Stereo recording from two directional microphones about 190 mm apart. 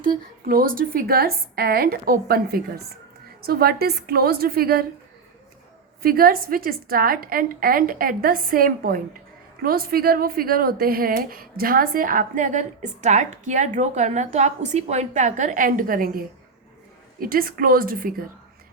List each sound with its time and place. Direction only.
0.0 s a woman's voice: 50° right (ahead or behind)
6.0 s a woman's voice: 50° right (ahead or behind)